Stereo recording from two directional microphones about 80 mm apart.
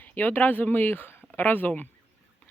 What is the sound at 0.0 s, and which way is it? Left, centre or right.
Speech, left.